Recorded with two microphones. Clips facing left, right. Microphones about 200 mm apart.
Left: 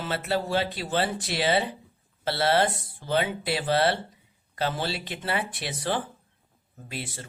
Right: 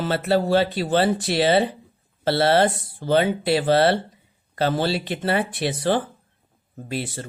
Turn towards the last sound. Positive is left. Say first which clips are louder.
# right 8 dB
turn(degrees=-35)  # may be behind; listen again after turning